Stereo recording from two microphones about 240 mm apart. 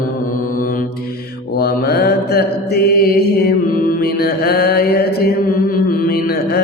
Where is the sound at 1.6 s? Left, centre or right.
Left.